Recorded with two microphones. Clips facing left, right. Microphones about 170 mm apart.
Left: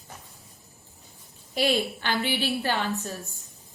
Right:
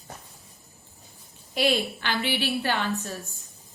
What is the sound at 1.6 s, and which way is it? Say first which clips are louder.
Speech: even; 45° left (ahead or behind).